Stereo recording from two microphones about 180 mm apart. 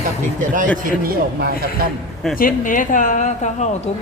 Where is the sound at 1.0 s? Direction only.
55° right (ahead or behind).